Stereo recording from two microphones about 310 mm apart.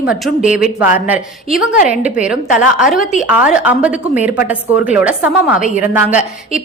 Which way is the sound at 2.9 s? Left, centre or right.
Left.